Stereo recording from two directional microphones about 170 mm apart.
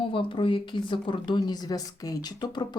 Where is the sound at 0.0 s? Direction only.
30° left (ahead or behind).